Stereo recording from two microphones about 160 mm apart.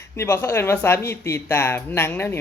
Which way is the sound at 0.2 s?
15° left (ahead or behind).